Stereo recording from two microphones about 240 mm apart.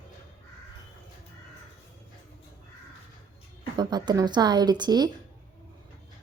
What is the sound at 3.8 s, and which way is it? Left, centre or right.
Speech, centre.